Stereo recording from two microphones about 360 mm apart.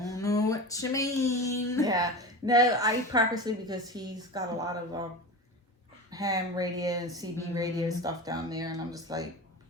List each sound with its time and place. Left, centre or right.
0.2 s a sound: centre
1.8 s a woman's voice: centre
6.1 s a woman's voice: centre